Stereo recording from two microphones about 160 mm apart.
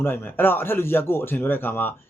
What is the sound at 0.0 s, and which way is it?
Speech, 15° left (ahead or behind).